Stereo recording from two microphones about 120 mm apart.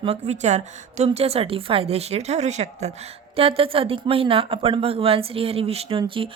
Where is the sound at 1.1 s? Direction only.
55° right (ahead or behind).